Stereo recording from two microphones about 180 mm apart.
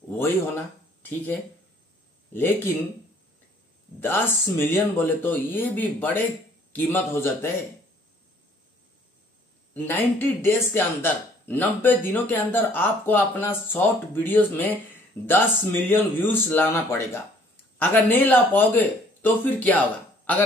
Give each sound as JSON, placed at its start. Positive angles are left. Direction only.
{"t": 1.0, "sound": "speech", "side_deg": 10}
{"t": 4.0, "sound": "speech", "side_deg": 15}
{"t": 9.8, "sound": "speech", "side_deg": 10}